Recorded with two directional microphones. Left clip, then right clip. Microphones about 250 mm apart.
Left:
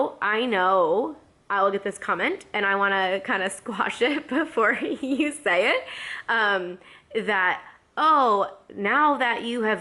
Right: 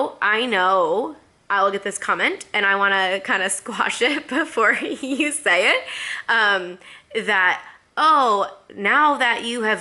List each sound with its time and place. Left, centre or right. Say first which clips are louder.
0.2 s a woman's voice: right 7 dB; centre
0.9 s speech: right 2 dB; left
1.5 s a woman's voice: right 3 dB; centre